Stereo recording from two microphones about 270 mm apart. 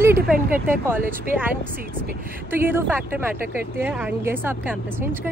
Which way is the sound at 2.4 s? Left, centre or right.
Centre.